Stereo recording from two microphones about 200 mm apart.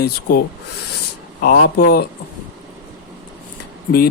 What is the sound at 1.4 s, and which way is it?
Speech, 50° left (ahead or behind).